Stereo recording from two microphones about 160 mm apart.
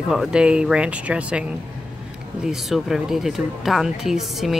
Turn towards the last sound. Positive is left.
turn(degrees=0)  # may be behind; listen again after turning